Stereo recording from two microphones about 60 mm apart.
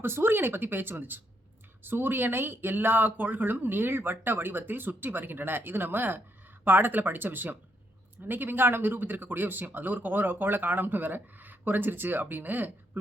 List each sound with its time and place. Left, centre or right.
0.0 s speech: right